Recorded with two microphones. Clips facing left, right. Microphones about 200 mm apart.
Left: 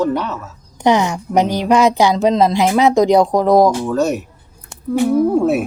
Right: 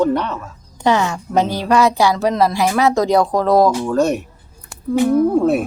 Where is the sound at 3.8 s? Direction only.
Centre (ahead or behind).